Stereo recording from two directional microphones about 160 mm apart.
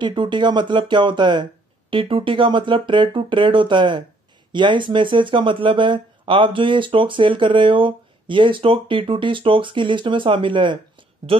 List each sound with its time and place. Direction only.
0.0 s speech: 30° right (ahead or behind)